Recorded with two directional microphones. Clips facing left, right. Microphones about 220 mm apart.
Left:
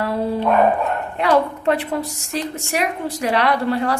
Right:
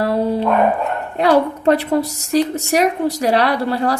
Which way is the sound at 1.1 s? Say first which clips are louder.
Right 4 dB; 40° right (ahead or behind).